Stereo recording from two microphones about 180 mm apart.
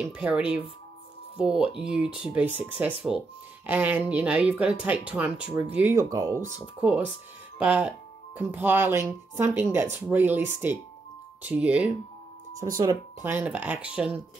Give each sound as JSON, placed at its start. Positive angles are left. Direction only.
{"t": 0.0, "sound": "speech", "side_deg": -10}
{"t": 5.9, "sound": "speech", "side_deg": -20}
{"t": 7.5, "sound": "speech", "side_deg": -5}
{"t": 12.7, "sound": "speech", "side_deg": -20}
{"t": 13.3, "sound": "speech", "side_deg": -10}